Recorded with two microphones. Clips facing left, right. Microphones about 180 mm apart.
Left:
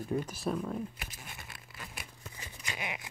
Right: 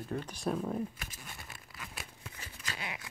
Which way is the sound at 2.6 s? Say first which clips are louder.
Left 2 dB; 15° left (ahead or behind).